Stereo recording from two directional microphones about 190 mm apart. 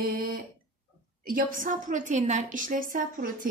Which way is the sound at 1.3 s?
45° right (ahead or behind).